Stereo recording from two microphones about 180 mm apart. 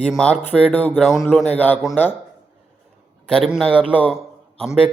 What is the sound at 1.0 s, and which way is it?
Speech, centre (ahead or behind).